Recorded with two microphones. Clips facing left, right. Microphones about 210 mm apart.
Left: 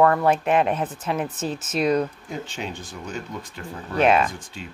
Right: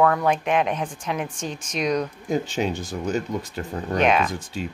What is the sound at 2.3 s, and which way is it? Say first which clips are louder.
Speech: right 8 dB; 40° right (ahead or behind).